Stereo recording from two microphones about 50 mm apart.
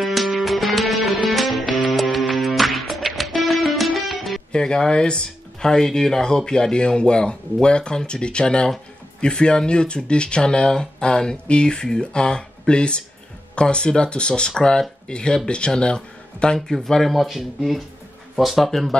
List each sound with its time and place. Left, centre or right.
0.0 s music: centre
4.5 s speech: centre
16.5 s speech: centre